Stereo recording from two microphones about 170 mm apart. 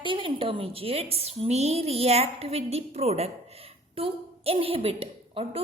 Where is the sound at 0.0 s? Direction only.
30° right (ahead or behind).